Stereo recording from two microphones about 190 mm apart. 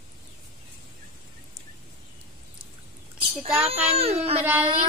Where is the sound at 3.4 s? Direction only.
35° right (ahead or behind).